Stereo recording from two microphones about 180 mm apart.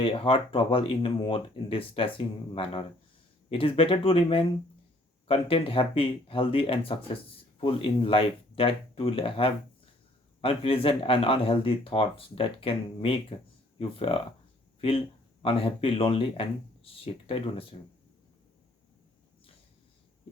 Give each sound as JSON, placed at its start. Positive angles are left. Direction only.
{"t": 0.0, "sound": "speech", "side_deg": 30}